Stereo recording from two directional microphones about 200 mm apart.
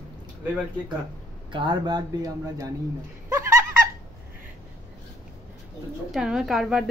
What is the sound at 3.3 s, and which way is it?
Laughter, 15° right (ahead or behind).